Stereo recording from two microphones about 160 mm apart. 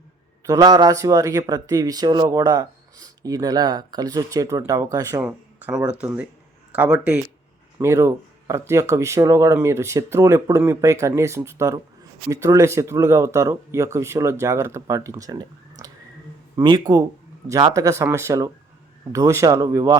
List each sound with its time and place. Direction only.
0.4 s speech: 20° right (ahead or behind)
5.2 s speech: 10° right (ahead or behind)
7.8 s speech: 15° right (ahead or behind)
16.6 s speech: 25° right (ahead or behind)